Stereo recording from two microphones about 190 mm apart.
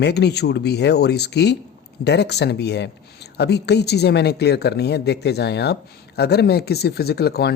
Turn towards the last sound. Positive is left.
turn(degrees=60)  # may be behind; listen again after turning